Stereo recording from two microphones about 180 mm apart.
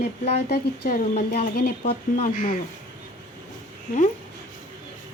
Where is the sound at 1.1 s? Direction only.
40° left (ahead or behind).